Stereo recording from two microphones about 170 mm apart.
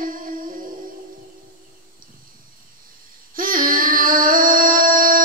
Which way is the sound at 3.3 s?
55° right (ahead or behind).